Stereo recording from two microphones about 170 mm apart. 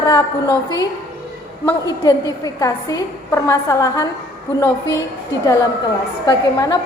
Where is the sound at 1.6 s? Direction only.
20° left (ahead or behind).